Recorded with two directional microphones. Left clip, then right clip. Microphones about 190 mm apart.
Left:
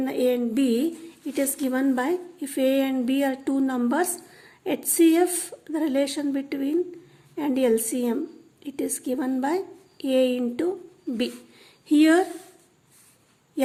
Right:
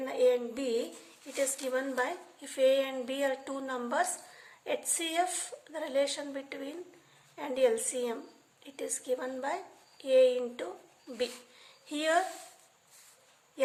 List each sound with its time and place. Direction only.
0.0 s a woman's voice: 50° left (ahead or behind)